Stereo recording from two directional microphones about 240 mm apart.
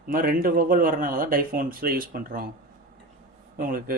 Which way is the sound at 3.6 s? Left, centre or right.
Right.